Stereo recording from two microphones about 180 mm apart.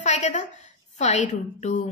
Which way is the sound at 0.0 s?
40° left (ahead or behind).